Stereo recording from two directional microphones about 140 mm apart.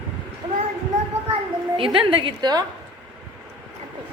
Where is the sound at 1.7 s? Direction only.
40° right (ahead or behind).